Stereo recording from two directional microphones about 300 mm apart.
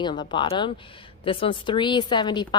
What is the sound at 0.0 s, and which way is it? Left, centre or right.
Speech, centre.